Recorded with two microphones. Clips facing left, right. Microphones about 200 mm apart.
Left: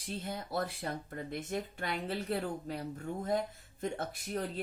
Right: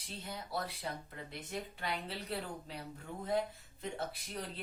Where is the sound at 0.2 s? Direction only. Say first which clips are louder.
Left 4 dB; 50° left (ahead or behind).